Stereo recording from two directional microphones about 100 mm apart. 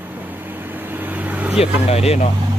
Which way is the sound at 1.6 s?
90° left.